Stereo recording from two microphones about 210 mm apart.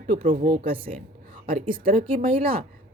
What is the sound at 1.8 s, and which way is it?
Speech, 40° right (ahead or behind).